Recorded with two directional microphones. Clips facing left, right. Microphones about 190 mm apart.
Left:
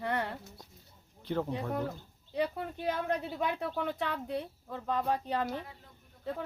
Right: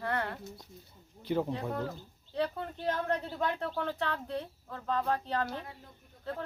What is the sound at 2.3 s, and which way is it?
Speech, 10° left (ahead or behind).